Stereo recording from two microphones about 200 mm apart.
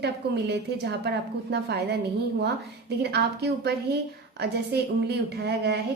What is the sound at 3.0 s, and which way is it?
Speech, 55° right (ahead or behind).